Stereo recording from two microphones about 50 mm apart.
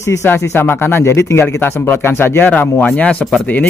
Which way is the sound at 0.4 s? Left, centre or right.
Left.